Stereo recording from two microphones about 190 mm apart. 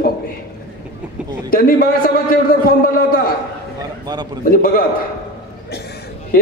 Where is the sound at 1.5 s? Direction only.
50° left (ahead or behind).